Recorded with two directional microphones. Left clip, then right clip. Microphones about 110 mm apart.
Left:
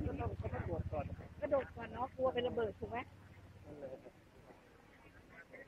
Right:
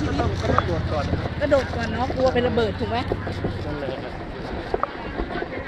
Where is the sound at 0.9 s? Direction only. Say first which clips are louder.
Right 19 dB; 50° right (ahead or behind).